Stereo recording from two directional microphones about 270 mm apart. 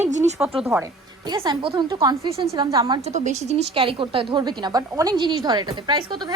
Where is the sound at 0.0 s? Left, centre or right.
Right.